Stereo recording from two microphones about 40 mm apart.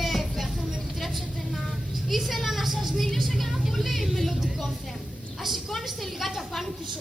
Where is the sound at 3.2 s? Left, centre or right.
Centre.